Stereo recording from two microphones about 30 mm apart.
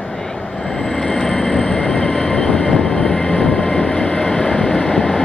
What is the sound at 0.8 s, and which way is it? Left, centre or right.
Train, centre.